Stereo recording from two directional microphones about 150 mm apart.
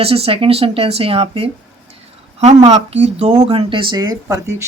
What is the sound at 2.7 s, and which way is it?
Speech, 45° right (ahead or behind).